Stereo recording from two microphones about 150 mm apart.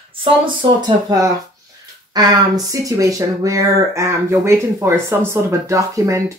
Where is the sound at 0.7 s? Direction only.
25° right (ahead or behind).